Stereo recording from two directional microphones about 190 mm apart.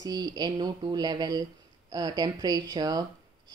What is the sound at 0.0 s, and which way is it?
Speech, 20° right (ahead or behind).